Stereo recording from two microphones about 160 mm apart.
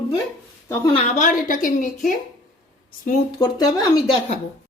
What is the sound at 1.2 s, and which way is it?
Speech, 55° left (ahead or behind).